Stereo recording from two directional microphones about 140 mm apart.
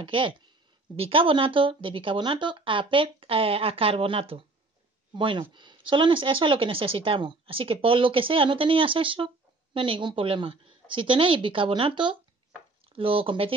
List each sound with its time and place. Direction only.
0.0 s speech: 35° right (ahead or behind)